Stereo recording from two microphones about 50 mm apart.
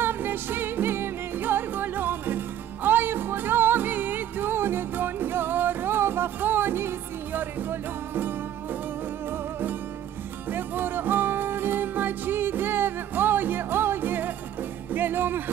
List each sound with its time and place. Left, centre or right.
0.0 s music: right